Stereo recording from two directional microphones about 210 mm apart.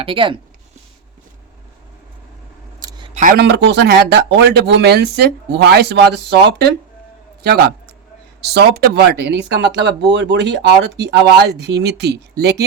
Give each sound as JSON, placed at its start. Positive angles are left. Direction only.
{"t": 0.0, "sound": "speech", "side_deg": -25}
{"t": 2.8, "sound": "camera", "side_deg": -20}
{"t": 3.2, "sound": "speech", "side_deg": -45}
{"t": 8.4, "sound": "speech", "side_deg": -50}